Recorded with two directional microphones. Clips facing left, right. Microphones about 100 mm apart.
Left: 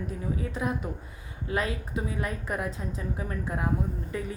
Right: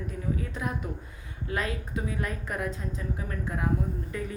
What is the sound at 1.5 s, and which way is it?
A woman's voice, 20° left (ahead or behind).